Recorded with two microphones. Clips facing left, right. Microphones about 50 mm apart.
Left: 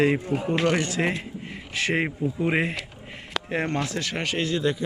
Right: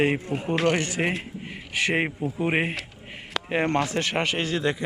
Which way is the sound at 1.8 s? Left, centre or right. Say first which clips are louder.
Even; right.